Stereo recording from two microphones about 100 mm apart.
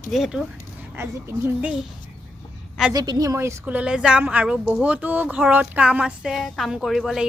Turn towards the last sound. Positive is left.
turn(degrees=-5)  # may be behind; listen again after turning